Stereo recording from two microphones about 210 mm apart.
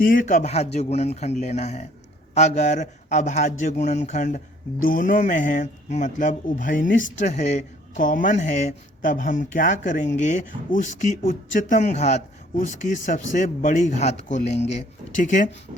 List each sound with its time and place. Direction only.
0.0 s speech: 40° left (ahead or behind)